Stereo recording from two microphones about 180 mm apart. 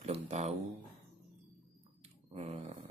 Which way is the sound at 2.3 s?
35° right (ahead or behind).